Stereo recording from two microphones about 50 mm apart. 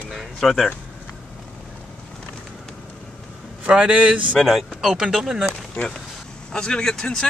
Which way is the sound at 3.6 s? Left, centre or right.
Right.